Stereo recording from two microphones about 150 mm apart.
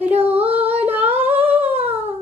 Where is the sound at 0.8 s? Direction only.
10° right (ahead or behind).